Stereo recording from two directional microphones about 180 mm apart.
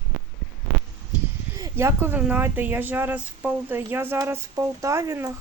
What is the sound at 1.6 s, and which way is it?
Speech, 15° right (ahead or behind).